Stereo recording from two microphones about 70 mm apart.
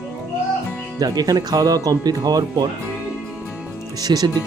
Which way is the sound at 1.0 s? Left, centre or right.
Right.